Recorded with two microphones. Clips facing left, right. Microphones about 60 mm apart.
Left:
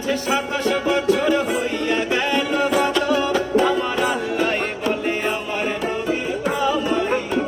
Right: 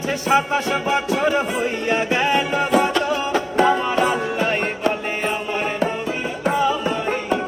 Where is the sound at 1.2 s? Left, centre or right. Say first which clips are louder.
Even; right.